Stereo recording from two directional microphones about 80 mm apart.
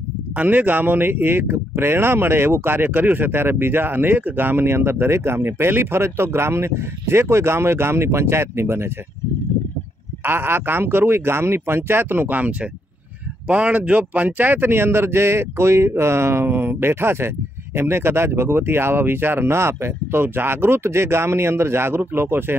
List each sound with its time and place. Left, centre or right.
0.4 s speech: right
10.2 s speech: right